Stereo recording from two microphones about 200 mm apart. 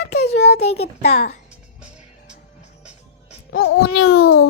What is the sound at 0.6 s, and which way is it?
Speech, 30° left (ahead or behind).